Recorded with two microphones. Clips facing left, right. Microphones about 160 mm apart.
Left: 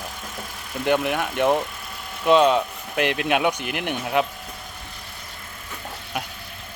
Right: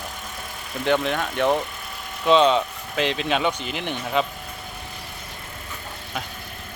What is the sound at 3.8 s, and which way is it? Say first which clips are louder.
Speech: left 1 dB; 10° left (ahead or behind).